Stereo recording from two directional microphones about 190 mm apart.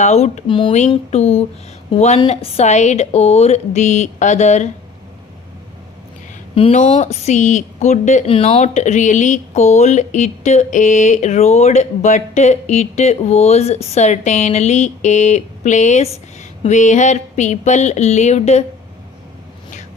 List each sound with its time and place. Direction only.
0.0 s speech: 35° left (ahead or behind)
6.6 s speech: 35° left (ahead or behind)